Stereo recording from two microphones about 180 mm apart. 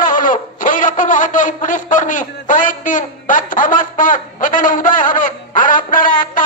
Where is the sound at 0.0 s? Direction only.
50° left (ahead or behind).